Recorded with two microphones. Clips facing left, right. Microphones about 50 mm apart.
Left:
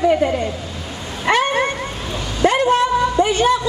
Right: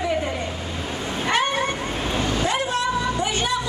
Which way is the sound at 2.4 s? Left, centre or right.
Left.